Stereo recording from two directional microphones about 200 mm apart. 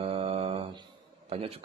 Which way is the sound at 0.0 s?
25° right (ahead or behind).